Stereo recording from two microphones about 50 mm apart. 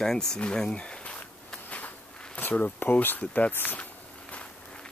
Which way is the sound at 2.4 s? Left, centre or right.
Left.